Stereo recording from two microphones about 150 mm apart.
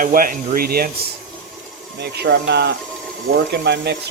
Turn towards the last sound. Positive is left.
turn(degrees=-90)